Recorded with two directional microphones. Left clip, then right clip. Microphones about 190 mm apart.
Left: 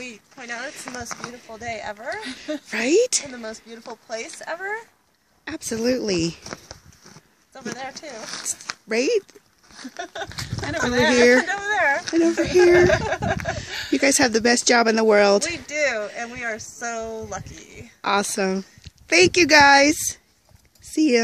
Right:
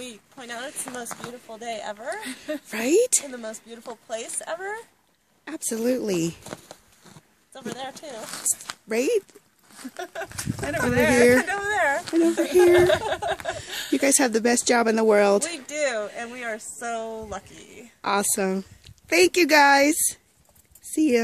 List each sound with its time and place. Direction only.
0.1 s speech: centre (ahead or behind)
2.1 s speech: 20° right (ahead or behind)
2.7 s speech: centre (ahead or behind)
9.8 s speech: 20° right (ahead or behind)
11.7 s speech: 5° right (ahead or behind)